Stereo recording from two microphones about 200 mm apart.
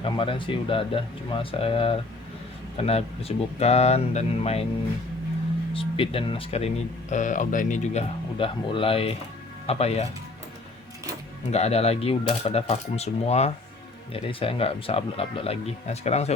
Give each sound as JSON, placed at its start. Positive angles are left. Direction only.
{"t": 0.0, "sound": "speech", "side_deg": 25}
{"t": 5.7, "sound": "speech", "side_deg": 25}
{"t": 8.4, "sound": "speech", "side_deg": 25}
{"t": 11.5, "sound": "speech", "side_deg": 30}